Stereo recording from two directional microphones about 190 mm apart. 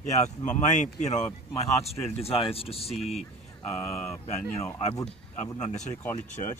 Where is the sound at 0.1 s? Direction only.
40° left (ahead or behind).